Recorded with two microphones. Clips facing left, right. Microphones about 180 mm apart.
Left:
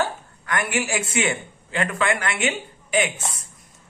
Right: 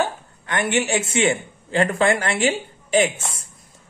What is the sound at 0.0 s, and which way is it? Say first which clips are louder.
A woman's voice: right 2 dB; 25° right (ahead or behind).